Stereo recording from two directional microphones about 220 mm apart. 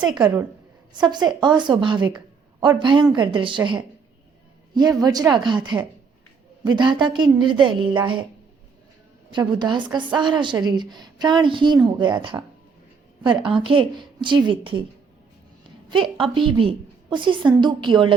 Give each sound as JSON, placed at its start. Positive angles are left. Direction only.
{"t": 0.2, "sound": "a woman's voice", "side_deg": -5}
{"t": 0.9, "sound": "a woman's voice", "side_deg": -20}
{"t": 9.3, "sound": "a woman's voice", "side_deg": -20}
{"t": 15.9, "sound": "a woman's voice", "side_deg": -25}